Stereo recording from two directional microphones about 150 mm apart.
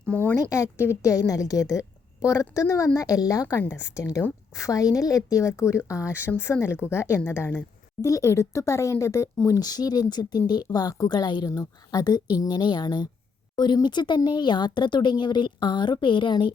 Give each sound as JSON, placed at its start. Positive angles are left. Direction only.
{"t": 0.5, "sound": "a woman's voice", "side_deg": 20}